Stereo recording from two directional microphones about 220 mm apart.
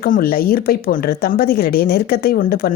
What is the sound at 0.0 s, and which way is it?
Speech, 40° left (ahead or behind).